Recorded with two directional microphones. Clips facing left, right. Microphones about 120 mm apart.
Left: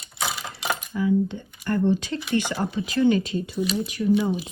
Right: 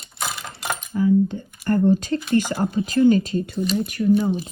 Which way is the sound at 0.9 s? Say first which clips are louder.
Right 5 dB; 45° right (ahead or behind).